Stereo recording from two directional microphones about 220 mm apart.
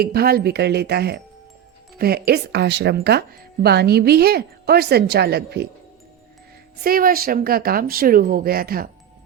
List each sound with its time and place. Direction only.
0.0 s speech: 45° right (ahead or behind)
6.8 s speech: 40° right (ahead or behind)